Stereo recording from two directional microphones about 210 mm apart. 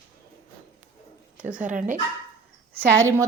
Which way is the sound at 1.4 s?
5° right (ahead or behind).